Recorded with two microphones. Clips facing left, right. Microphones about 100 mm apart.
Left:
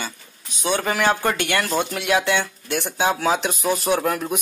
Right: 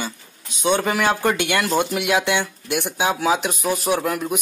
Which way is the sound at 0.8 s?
10° right (ahead or behind).